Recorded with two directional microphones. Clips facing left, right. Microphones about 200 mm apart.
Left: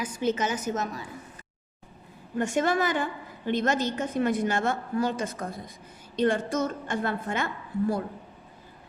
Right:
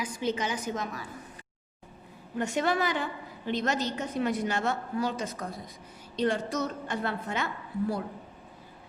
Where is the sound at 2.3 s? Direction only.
50° left (ahead or behind).